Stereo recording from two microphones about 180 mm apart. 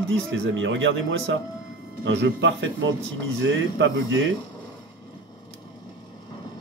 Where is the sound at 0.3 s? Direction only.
90° right.